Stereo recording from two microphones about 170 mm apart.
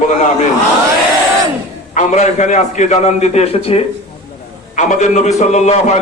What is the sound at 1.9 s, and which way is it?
A man's voice, 45° left (ahead or behind).